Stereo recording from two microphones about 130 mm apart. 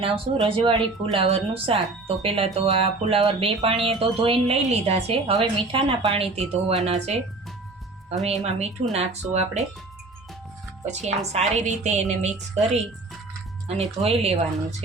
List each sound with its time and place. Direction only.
0.0 s speech: 45° right (ahead or behind)
8.2 s speech: 55° right (ahead or behind)
11.0 s a woman's voice: 60° right (ahead or behind)
13.7 s speech: 55° right (ahead or behind)